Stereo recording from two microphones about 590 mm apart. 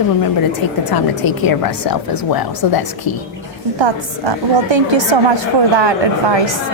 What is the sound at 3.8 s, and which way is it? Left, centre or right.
A woman's voice, right.